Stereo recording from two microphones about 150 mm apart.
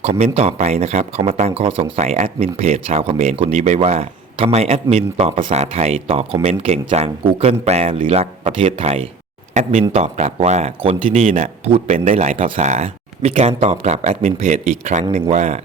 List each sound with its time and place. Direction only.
0.0 s speech: 45° right (ahead or behind)